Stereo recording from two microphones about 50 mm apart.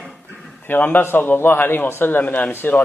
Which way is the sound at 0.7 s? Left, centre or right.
Left.